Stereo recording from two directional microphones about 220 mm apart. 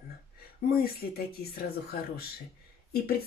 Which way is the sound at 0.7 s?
45° left (ahead or behind).